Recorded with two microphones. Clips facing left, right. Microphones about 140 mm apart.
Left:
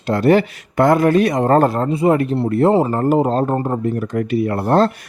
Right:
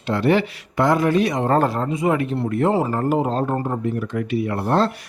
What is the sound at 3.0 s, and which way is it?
Speech, 40° left (ahead or behind).